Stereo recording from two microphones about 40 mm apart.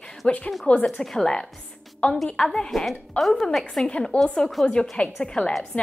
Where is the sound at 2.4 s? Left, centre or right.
Centre.